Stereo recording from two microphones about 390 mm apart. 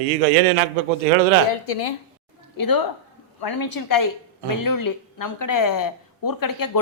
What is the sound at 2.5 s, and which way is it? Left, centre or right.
A woman's voice, left.